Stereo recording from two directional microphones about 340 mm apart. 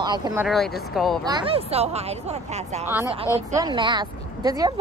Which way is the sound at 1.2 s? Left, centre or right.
Centre.